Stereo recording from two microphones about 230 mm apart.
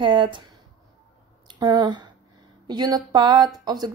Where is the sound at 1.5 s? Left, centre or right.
Centre.